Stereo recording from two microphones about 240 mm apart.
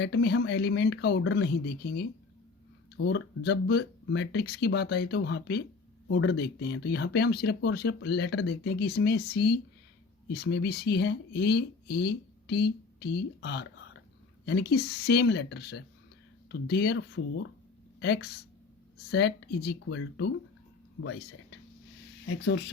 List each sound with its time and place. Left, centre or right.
0.0 s speech: left